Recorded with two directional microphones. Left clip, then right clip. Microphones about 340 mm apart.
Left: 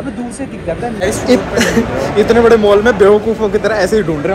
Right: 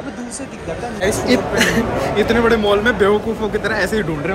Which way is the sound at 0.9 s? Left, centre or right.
Centre.